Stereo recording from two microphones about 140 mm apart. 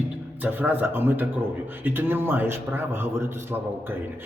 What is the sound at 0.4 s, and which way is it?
A man's voice, 15° right (ahead or behind).